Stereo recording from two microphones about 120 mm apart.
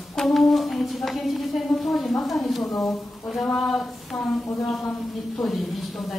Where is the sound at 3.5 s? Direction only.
5° left (ahead or behind).